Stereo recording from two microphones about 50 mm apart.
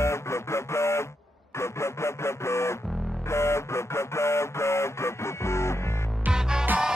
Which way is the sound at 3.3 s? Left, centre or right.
Left.